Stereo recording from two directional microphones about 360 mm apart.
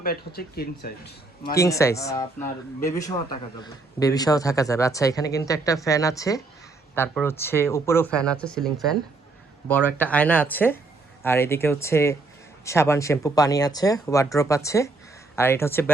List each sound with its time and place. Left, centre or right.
0.0 s a man's voice: left
1.5 s a man's voice: centre